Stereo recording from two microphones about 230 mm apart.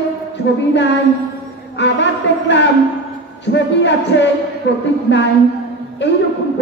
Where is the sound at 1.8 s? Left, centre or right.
Left.